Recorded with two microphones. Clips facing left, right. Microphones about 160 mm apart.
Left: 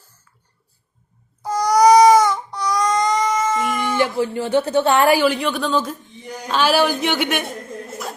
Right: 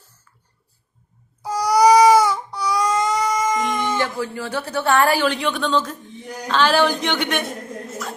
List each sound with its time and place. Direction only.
1.4 s baby cry: 10° right (ahead or behind)
3.9 s speech: 15° left (ahead or behind)